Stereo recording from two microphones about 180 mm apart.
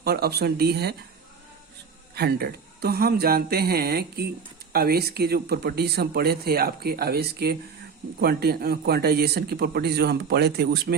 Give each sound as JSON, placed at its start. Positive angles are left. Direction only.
{"t": 0.0, "sound": "speech", "side_deg": -60}
{"t": 2.1, "sound": "speech", "side_deg": -60}